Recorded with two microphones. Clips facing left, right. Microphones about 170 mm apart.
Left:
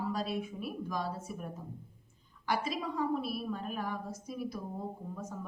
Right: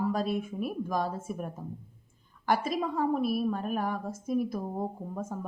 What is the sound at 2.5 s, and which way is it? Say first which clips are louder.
Speech: right 6 dB; 50° right (ahead or behind).